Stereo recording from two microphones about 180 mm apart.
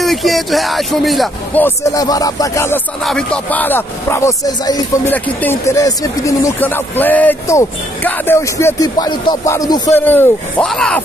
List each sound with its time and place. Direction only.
0.0 s speech: centre (ahead or behind)
1.6 s speech: 20° left (ahead or behind)
3.1 s speech: 5° left (ahead or behind)